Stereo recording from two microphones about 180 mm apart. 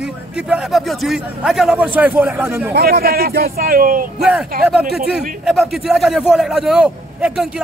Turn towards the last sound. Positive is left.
turn(degrees=-5)  # may be behind; listen again after turning